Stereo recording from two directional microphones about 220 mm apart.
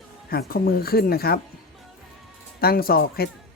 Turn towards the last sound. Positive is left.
turn(degrees=45)  # may be behind; listen again after turning